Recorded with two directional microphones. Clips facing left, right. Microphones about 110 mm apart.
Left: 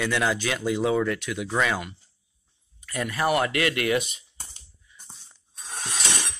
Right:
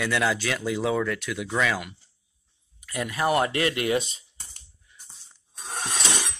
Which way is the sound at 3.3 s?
25° right (ahead or behind).